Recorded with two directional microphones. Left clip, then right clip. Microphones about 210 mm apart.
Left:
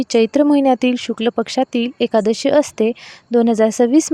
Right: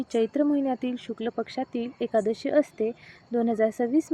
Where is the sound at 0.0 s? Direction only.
45° left (ahead or behind).